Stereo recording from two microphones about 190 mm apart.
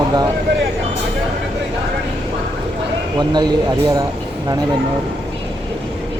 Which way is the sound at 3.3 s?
20° right (ahead or behind).